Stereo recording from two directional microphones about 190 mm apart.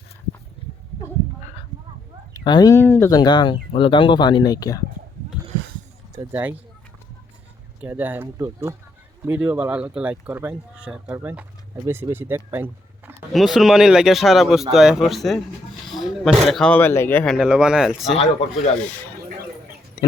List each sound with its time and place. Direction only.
2.3 s speech: 20° left (ahead or behind)
6.1 s speech: 10° right (ahead or behind)
7.8 s speech: 10° right (ahead or behind)
13.3 s speech: centre (ahead or behind)
18.2 s speech: 35° left (ahead or behind)